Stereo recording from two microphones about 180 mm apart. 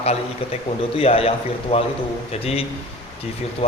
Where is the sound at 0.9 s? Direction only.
35° left (ahead or behind).